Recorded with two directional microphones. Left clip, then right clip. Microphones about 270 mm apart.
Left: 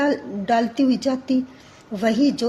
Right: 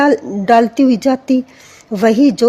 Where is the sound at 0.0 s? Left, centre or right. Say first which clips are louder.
Right 9 dB; right.